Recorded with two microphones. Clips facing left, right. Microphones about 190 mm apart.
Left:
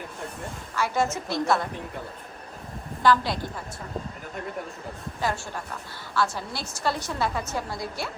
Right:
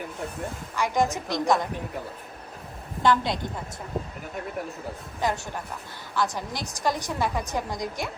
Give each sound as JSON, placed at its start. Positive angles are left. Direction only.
{"t": 0.8, "sound": "a woman's voice", "side_deg": -15}
{"t": 3.0, "sound": "a woman's voice", "side_deg": -20}
{"t": 5.2, "sound": "a woman's voice", "side_deg": -15}